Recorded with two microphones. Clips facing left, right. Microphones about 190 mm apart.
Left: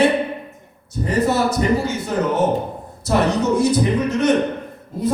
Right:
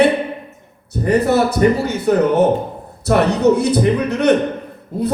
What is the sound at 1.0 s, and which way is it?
Speech, 60° right (ahead or behind).